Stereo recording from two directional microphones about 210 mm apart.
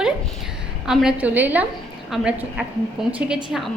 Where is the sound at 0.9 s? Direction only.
5° right (ahead or behind).